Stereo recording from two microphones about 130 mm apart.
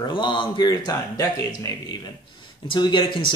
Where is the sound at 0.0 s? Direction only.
35° left (ahead or behind).